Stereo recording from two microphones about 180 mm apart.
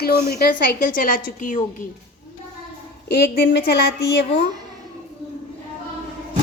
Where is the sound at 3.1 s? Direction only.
65° left (ahead or behind).